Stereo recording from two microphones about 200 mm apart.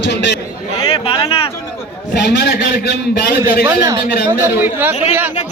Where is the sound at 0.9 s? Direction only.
25° left (ahead or behind).